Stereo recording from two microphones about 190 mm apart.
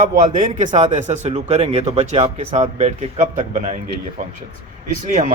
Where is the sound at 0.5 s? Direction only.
40° right (ahead or behind).